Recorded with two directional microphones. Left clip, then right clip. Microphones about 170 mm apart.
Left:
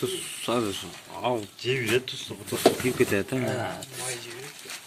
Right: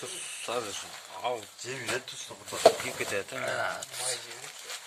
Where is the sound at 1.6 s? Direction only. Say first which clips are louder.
Left 11 dB; 35° right (ahead or behind).